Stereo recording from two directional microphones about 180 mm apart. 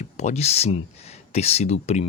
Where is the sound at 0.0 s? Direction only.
40° left (ahead or behind).